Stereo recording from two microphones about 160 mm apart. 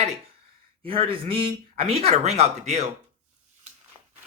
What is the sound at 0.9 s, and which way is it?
Speech, 35° right (ahead or behind).